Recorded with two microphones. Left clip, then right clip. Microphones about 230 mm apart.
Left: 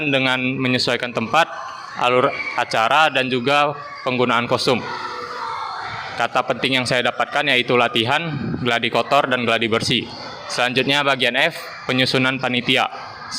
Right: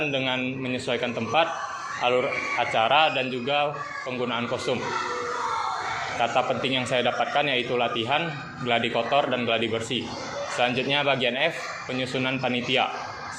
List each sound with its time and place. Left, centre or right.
0.0 s a man's voice: left
6.1 s a man's voice: left